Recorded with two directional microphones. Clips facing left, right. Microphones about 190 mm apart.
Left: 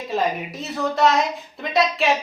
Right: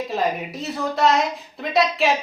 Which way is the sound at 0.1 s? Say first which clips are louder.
Left 4 dB; centre (ahead or behind).